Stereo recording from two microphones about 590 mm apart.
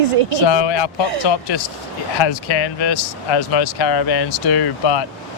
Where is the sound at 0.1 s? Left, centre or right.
Right.